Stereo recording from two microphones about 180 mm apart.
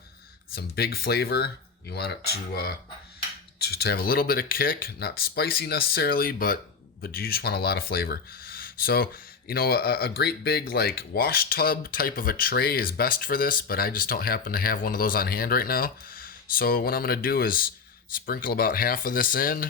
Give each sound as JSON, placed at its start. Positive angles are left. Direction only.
{"t": 0.5, "sound": "speech", "side_deg": 60}